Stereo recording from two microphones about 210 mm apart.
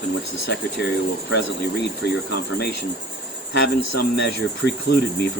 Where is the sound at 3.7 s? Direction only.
50° left (ahead or behind).